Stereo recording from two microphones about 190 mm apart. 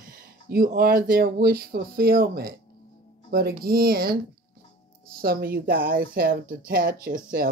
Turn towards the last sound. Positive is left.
turn(degrees=-50)  # may be behind; listen again after turning